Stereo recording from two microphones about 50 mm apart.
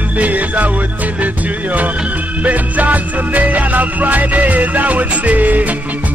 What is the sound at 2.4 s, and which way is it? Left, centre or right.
Music, right.